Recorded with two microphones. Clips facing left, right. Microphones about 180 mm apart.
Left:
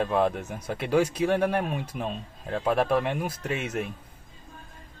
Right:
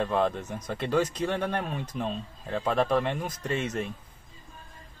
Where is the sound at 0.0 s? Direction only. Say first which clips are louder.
Left 2 dB; 10° left (ahead or behind).